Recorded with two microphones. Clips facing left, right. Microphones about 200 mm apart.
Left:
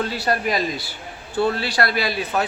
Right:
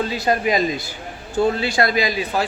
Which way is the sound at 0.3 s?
20° right (ahead or behind).